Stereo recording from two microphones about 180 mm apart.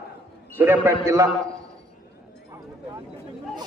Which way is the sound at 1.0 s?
20° right (ahead or behind).